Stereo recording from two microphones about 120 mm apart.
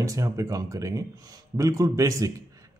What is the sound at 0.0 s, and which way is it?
Speech, 30° right (ahead or behind).